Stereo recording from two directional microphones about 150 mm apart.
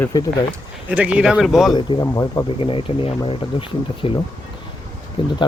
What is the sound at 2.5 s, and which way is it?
Speech, 35° left (ahead or behind).